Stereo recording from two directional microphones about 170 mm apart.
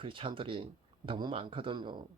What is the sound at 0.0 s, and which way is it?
Speech, 30° right (ahead or behind).